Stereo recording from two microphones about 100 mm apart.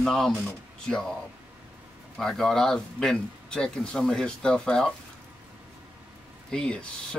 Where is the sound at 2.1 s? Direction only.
5° left (ahead or behind).